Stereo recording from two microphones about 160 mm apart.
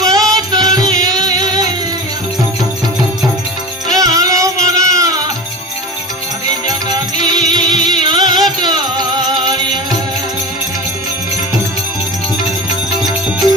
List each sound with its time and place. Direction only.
0.0 s music: 20° right (ahead or behind)
3.8 s music: 20° right (ahead or behind)
6.7 s music: 25° right (ahead or behind)